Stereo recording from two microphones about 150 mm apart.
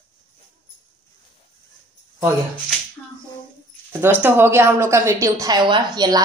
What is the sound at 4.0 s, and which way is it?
A woman's voice, 15° right (ahead or behind).